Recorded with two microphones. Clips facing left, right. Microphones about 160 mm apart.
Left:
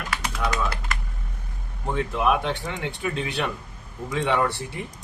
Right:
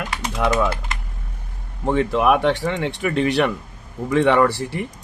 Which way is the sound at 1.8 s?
70° right (ahead or behind).